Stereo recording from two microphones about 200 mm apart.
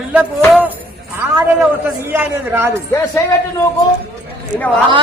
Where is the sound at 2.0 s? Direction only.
10° right (ahead or behind).